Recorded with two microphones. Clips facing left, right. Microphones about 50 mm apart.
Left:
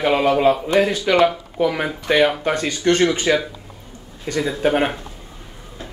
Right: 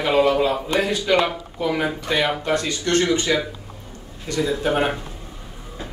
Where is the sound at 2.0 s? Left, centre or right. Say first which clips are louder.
Left 8 dB; left.